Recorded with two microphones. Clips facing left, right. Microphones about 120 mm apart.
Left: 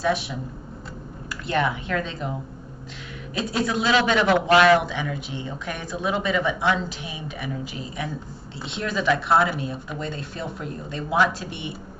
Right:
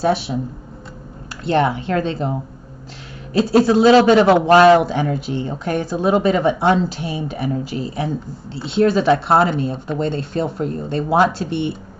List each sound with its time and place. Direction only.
0.0 s a man's voice: 35° right (ahead or behind)
1.4 s a man's voice: 30° right (ahead or behind)
3.6 s a man's voice: 35° right (ahead or behind)